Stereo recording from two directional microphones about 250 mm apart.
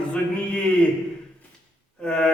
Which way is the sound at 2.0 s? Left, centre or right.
Centre.